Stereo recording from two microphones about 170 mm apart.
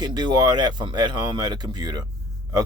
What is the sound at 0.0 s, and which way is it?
A man's voice, 25° right (ahead or behind).